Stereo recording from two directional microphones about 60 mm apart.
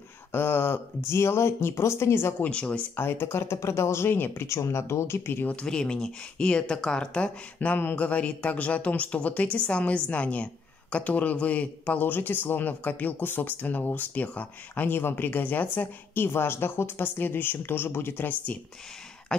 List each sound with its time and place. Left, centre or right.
0.3 s speech: left
2.4 s speech: centre
3.0 s speech: left
5.5 s speech: centre